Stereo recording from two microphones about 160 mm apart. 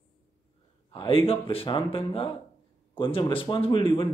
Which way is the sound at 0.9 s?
35° left (ahead or behind).